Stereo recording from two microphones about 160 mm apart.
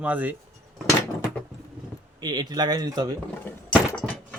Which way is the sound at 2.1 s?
25° right (ahead or behind).